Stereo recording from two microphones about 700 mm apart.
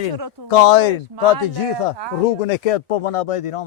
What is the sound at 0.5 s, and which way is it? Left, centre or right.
Speech, left.